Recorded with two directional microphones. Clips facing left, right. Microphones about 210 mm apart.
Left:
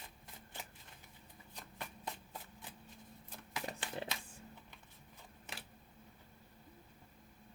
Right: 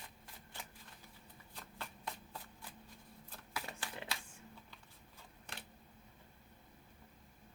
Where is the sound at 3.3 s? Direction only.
20° left (ahead or behind).